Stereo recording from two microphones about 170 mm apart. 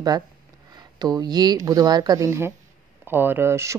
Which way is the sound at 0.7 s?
25° right (ahead or behind).